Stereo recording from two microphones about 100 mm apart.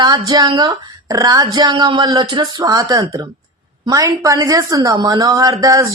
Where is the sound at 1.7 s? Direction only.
50° right (ahead or behind).